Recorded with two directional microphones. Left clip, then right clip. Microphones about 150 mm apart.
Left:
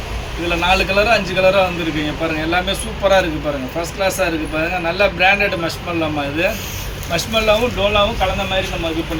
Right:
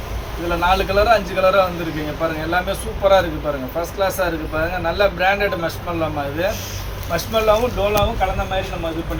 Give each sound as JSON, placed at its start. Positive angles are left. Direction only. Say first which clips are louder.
{"t": 0.5, "sound": "speech", "louder": "left 2 dB", "side_deg": -10}